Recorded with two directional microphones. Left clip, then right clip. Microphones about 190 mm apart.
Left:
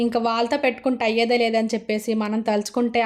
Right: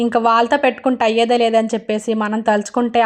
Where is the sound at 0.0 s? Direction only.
5° right (ahead or behind).